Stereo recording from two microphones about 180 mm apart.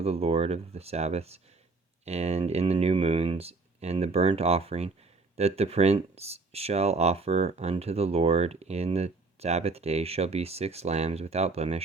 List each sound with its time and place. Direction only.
0.0 s speech: 35° right (ahead or behind)